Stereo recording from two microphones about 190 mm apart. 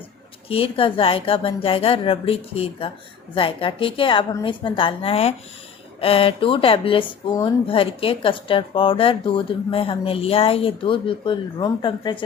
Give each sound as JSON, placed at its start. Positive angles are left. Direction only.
{"t": 0.4, "sound": "speech", "side_deg": 30}